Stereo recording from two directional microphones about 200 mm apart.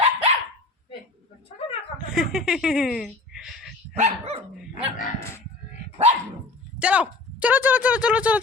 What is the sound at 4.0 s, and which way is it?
Dog, 30° right (ahead or behind).